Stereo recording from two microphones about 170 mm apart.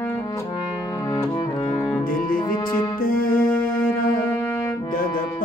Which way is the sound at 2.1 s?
55° left (ahead or behind).